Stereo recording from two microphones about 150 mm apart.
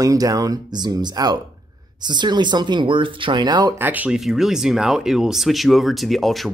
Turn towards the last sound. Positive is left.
turn(degrees=0)  # may be behind; listen again after turning